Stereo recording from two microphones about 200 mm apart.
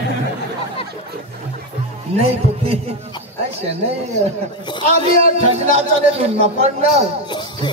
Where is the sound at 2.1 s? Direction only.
30° right (ahead or behind).